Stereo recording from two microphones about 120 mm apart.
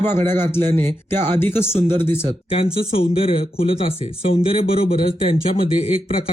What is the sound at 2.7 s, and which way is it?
Speech, 50° left (ahead or behind).